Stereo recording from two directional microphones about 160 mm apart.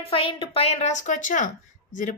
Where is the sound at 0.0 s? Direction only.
35° left (ahead or behind).